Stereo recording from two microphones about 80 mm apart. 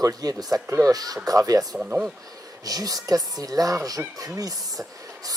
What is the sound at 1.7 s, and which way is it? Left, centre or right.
Speech, centre.